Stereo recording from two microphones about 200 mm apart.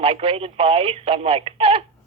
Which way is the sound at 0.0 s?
30° right (ahead or behind).